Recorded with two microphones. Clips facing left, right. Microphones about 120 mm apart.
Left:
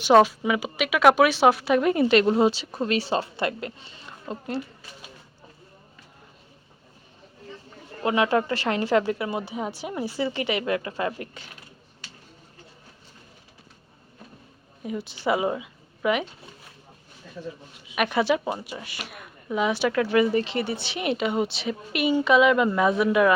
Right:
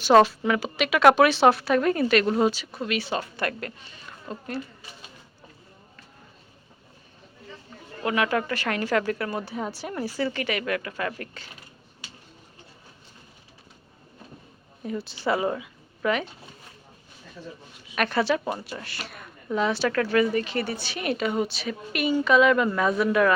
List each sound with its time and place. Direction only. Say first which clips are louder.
0.1 s speech: even; 10° left (ahead or behind)
8.0 s speech: left 3 dB; 25° left (ahead or behind)
14.8 s a woman's voice: left 1 dB; 20° left (ahead or behind)
17.9 s a woman's voice: left 1 dB; 15° left (ahead or behind)